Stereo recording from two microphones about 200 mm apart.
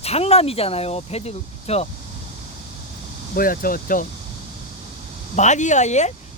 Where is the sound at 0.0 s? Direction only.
30° left (ahead or behind).